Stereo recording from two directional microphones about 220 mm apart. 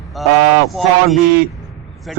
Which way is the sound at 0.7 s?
Centre (ahead or behind).